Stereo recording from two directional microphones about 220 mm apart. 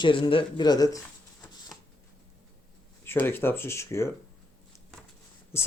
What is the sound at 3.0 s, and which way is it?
Speech, 10° left (ahead or behind).